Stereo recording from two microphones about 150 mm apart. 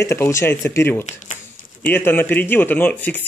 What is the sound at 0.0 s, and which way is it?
Speech, 20° left (ahead or behind).